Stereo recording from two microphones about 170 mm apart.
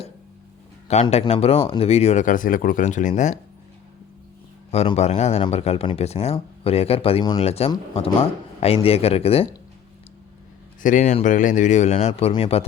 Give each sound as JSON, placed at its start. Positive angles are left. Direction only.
{"t": 1.2, "sound": "speech", "side_deg": 35}
{"t": 4.7, "sound": "speech", "side_deg": 40}
{"t": 10.8, "sound": "speech", "side_deg": 45}